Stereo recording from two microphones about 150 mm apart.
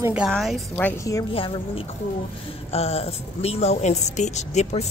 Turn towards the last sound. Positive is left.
turn(degrees=50)  # may be behind; listen again after turning